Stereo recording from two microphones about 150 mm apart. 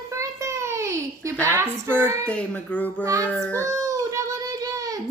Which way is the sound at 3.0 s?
20° right (ahead or behind).